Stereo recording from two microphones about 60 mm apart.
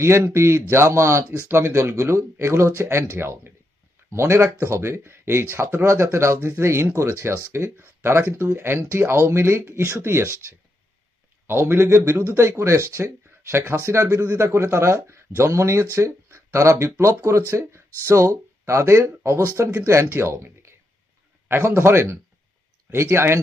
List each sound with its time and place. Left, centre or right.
0.0 s speech: right
11.4 s speech: right